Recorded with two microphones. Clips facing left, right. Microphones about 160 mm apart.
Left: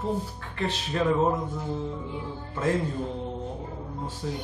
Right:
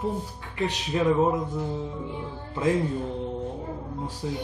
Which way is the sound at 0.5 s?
15° right (ahead or behind).